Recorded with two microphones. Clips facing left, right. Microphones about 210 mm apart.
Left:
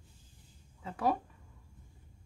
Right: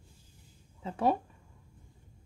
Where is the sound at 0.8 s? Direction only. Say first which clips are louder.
Right 3 dB; 25° right (ahead or behind).